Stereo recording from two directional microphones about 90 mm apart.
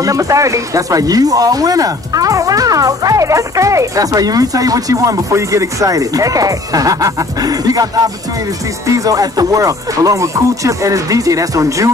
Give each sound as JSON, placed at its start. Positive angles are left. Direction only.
{"t": 0.0, "sound": "speech", "side_deg": -40}